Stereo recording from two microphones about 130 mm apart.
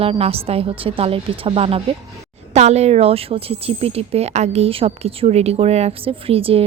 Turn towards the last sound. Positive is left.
turn(degrees=-45)  # may be behind; listen again after turning